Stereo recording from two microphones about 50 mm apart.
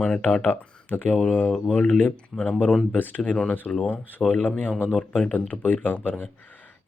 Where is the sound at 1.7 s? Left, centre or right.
Centre.